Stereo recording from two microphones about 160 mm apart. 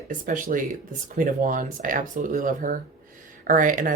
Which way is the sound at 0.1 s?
55° right (ahead or behind).